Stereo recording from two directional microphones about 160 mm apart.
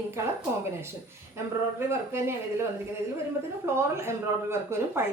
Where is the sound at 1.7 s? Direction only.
15° right (ahead or behind).